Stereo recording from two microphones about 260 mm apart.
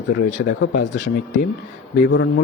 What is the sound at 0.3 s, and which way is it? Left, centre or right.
A man's voice, left.